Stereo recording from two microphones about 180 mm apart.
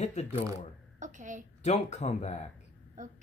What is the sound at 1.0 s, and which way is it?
Speech, 45° right (ahead or behind).